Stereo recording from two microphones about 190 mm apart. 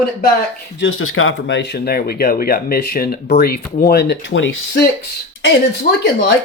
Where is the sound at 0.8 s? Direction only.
90° left; by 4.4 s 70° left (ahead or behind).